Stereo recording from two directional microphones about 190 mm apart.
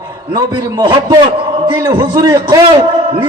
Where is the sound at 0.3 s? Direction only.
20° right (ahead or behind).